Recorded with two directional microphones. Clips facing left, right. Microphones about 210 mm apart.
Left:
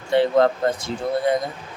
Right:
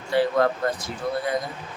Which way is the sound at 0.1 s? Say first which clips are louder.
Left 4 dB; 25° left (ahead or behind).